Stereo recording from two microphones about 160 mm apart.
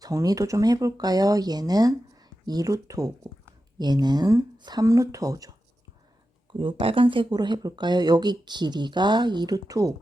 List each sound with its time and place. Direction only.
0.0 s speech: 20° right (ahead or behind)
6.5 s speech: 30° right (ahead or behind)